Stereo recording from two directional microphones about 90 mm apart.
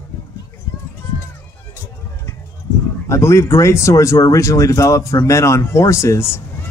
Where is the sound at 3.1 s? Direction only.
30° left (ahead or behind).